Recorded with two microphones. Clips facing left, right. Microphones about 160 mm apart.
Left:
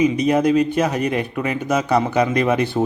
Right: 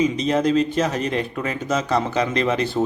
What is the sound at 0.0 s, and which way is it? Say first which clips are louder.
Speech: left 3 dB; 10° left (ahead or behind).